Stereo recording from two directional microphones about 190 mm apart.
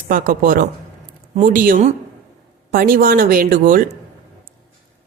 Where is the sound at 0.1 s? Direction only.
50° right (ahead or behind).